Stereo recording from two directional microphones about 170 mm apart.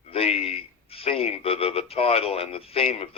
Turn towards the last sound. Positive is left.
turn(degrees=35)  # may be behind; listen again after turning